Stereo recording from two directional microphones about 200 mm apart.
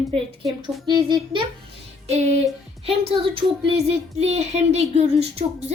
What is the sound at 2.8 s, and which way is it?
A child's voice, 30° right (ahead or behind).